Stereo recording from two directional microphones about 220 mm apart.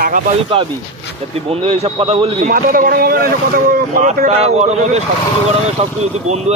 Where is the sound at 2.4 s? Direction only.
40° right (ahead or behind).